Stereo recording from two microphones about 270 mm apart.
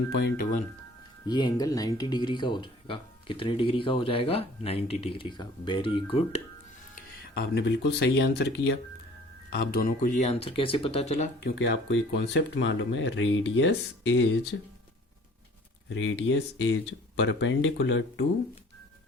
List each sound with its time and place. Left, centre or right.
0.2 s speech: left
1.2 s speech: centre
7.5 s speech: left
9.7 s speech: left
11.3 s speech: left
15.9 s speech: left